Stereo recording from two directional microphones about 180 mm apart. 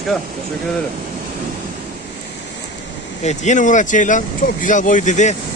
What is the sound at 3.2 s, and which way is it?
Speech, 40° left (ahead or behind).